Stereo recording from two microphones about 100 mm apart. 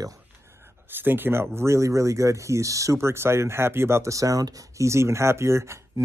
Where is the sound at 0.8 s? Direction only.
20° right (ahead or behind).